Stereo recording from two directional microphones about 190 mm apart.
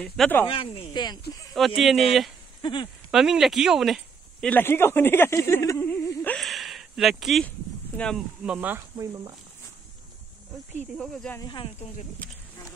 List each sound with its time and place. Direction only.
0.0 s speech: 5° left (ahead or behind)
0.5 s speech: 30° left (ahead or behind)
1.8 s speech: centre (ahead or behind)
2.6 s speech: 25° left (ahead or behind)
3.1 s speech: centre (ahead or behind); by 6.3 s 15° left (ahead or behind)
6.3 s a sound: centre (ahead or behind)
8.0 s speech: 5° left (ahead or behind)
8.5 s speech: 10° right (ahead or behind)
11.0 s speech: 5° left (ahead or behind)
11.4 s speech: 25° left (ahead or behind)